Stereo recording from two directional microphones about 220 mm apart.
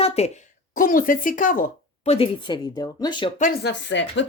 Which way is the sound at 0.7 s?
40° left (ahead or behind).